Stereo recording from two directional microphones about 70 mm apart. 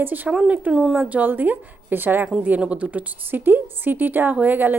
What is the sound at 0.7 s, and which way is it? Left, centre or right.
Speech, centre.